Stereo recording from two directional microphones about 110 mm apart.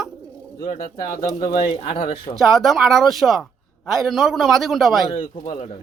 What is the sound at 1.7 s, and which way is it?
Speech, 55° left (ahead or behind).